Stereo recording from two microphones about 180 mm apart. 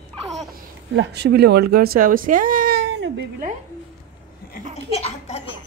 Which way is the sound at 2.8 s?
75° right (ahead or behind).